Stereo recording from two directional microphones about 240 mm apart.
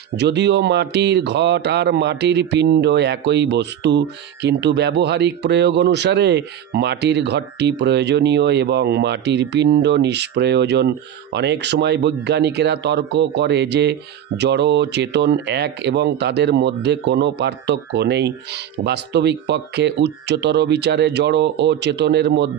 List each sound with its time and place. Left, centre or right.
0.2 s a man's voice: right